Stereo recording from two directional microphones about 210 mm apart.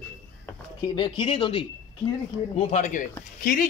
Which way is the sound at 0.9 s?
25° left (ahead or behind).